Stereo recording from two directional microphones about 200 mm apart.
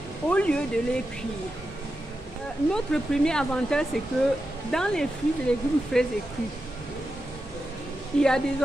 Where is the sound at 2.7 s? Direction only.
5° left (ahead or behind).